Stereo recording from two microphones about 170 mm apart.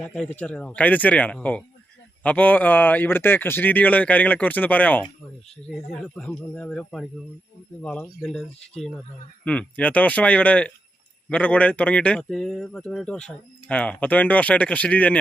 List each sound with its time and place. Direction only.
0.0 s speech: 5° left (ahead or behind)